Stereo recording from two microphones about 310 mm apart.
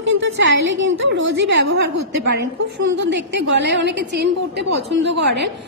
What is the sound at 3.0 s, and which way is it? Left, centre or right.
A woman's voice, right.